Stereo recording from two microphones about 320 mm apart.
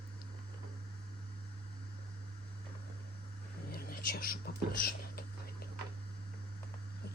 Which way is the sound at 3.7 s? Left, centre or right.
Left.